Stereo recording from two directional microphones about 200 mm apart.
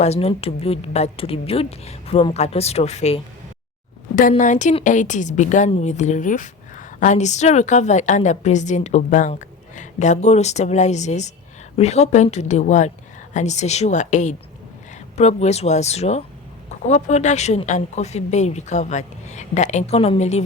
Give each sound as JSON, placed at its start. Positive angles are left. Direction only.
{"t": 0.0, "sound": "a woman's voice", "side_deg": 30}